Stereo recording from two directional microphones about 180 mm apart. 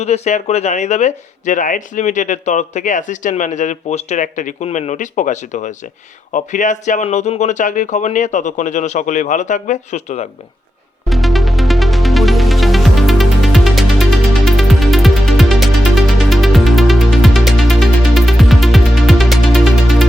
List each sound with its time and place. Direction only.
0.0 s speech: 40° left (ahead or behind)
11.1 s music: centre (ahead or behind)